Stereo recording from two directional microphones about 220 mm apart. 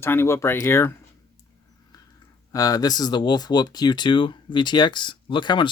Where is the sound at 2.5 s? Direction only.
15° left (ahead or behind).